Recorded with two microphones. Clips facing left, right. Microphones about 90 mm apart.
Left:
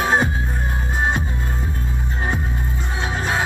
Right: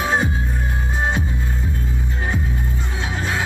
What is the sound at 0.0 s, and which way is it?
Music, 45° left (ahead or behind).